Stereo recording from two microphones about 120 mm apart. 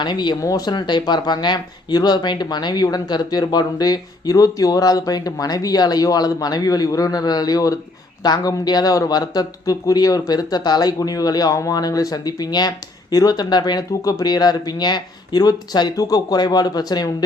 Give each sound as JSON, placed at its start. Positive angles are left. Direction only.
{"t": 0.0, "sound": "a man's voice", "side_deg": 35}